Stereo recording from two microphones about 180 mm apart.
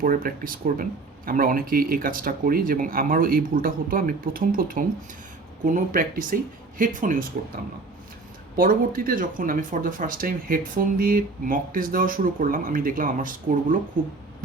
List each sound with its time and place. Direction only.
0.0 s speech: 50° right (ahead or behind)